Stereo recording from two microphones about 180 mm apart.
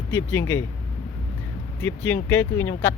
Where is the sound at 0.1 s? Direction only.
15° left (ahead or behind).